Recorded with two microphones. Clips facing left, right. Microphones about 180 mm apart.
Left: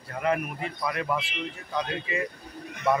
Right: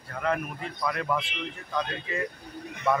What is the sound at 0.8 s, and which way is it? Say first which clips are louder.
Speech: right 1 dB; 5° left (ahead or behind).